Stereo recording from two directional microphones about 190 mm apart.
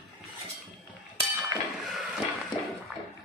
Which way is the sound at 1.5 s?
20° right (ahead or behind).